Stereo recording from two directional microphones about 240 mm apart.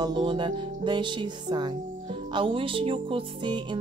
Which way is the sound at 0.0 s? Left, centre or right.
Centre.